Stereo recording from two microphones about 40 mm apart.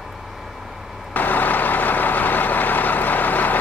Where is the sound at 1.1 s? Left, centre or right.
Left.